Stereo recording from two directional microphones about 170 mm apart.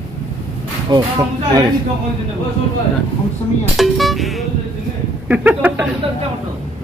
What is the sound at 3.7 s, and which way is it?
Speech, centre (ahead or behind).